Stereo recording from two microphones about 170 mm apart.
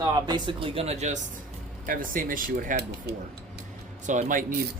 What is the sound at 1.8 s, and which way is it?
Speech, 55° right (ahead or behind).